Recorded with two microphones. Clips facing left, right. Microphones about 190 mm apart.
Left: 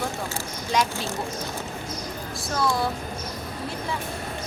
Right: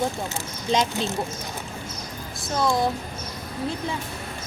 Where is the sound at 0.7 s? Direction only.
20° right (ahead or behind).